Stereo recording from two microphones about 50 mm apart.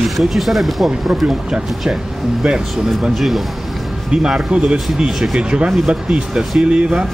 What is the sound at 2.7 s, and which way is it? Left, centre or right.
Speech, centre.